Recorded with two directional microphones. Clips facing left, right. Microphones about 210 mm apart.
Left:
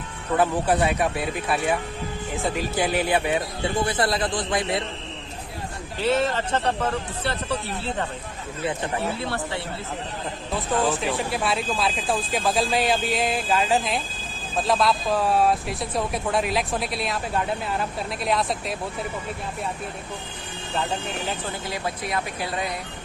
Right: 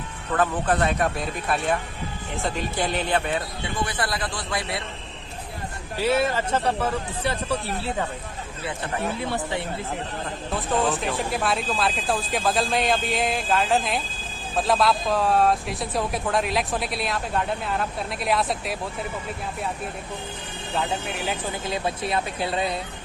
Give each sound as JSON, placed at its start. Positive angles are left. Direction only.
{"t": 0.3, "sound": "speech", "side_deg": 10}
{"t": 3.8, "sound": "a man's voice", "side_deg": 25}
{"t": 6.0, "sound": "speech", "side_deg": -10}
{"t": 9.0, "sound": "speech", "side_deg": -15}
{"t": 10.8, "sound": "speech", "side_deg": 0}
{"t": 21.7, "sound": "speech", "side_deg": -25}